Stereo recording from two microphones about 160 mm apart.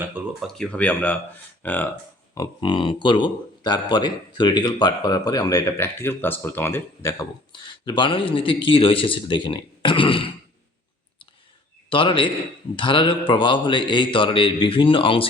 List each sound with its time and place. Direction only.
0.2 s speech: 10° right (ahead or behind)
0.5 s speech: 5° left (ahead or behind)
2.3 s speech: 25° left (ahead or behind)
7.5 s speech: 30° left (ahead or behind)
11.9 s a man's voice: 30° left (ahead or behind)